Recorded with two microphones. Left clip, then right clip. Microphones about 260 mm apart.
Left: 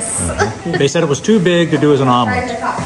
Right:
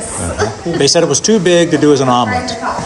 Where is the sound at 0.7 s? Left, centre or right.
Centre.